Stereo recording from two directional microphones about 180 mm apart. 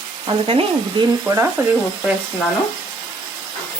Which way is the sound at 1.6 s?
10° right (ahead or behind).